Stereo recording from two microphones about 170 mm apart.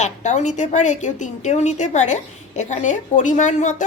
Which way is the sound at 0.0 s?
45° left (ahead or behind).